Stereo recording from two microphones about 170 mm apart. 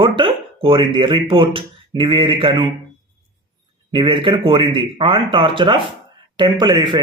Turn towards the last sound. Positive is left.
turn(degrees=-25)  # may be behind; listen again after turning